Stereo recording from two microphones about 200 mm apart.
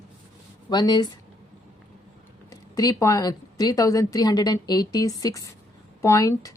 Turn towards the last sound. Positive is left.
turn(degrees=15)  # may be behind; listen again after turning